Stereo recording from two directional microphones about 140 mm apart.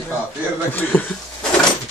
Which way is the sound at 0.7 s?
15° left (ahead or behind).